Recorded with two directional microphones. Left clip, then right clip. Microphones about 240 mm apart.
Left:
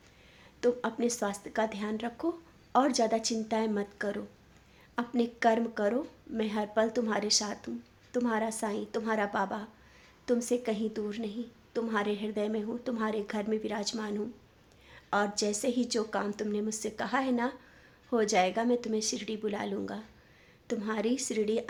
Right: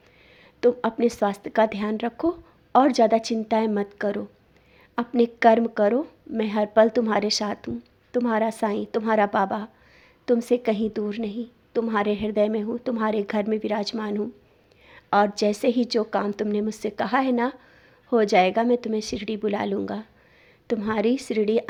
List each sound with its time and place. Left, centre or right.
0.6 s a woman's voice: right